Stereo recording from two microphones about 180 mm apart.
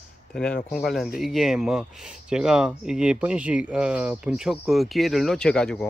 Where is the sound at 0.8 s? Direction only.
Centre (ahead or behind).